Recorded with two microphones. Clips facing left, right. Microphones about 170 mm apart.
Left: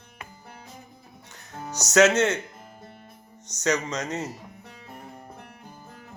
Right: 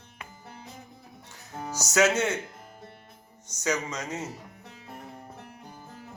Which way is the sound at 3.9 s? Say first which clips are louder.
Left 4 dB; 80° left.